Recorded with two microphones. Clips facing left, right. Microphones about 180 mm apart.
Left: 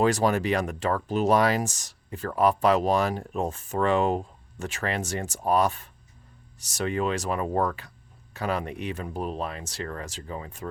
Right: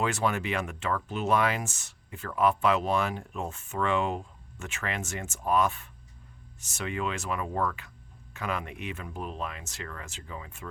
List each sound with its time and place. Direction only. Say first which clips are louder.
0.0 s speech: left 6 dB; 35° left (ahead or behind)